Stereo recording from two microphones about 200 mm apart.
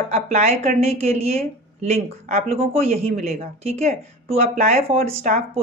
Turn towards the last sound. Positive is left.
turn(degrees=-30)  # may be behind; listen again after turning